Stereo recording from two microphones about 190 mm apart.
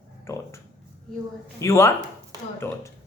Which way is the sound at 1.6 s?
15° left (ahead or behind).